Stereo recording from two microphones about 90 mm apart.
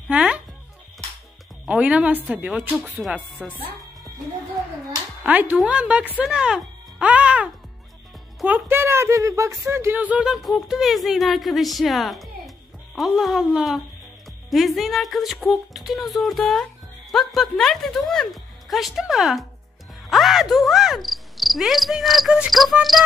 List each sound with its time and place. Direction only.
0.1 s music: 10° right (ahead or behind)
1.7 s a woman's voice: 15° right (ahead or behind)
2.7 s speech: centre (ahead or behind)
5.2 s a woman's voice: 15° right (ahead or behind)
6.1 s music: 10° right (ahead or behind)
8.5 s speech: 20° right (ahead or behind)
9.9 s a woman's voice: 15° right (ahead or behind)
10.3 s speech: centre (ahead or behind)
20.1 s cricket: centre (ahead or behind)
22.5 s speech: centre (ahead or behind)